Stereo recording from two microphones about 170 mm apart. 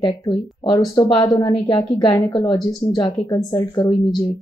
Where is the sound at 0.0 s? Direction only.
20° left (ahead or behind).